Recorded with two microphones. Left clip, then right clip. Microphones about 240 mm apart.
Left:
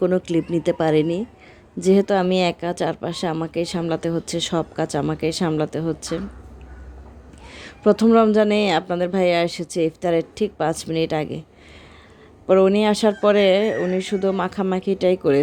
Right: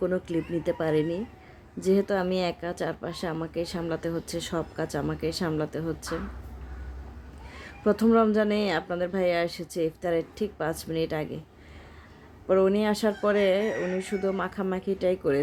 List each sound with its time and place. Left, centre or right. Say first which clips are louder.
0.0 s speech: left 8 dB; left
7.5 s speech: left 8 dB; left
12.5 s speech: left 7 dB; left